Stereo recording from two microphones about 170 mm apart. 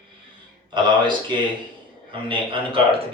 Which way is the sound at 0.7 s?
30° right (ahead or behind).